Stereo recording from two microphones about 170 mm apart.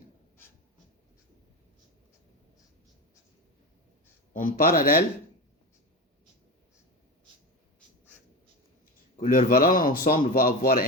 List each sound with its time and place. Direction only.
4.4 s a man's voice: 55° left (ahead or behind)
9.1 s a man's voice: 50° left (ahead or behind)